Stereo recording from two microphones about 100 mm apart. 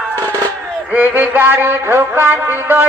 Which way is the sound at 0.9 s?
15° right (ahead or behind).